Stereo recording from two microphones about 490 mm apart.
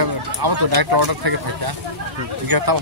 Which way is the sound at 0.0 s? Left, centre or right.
Right.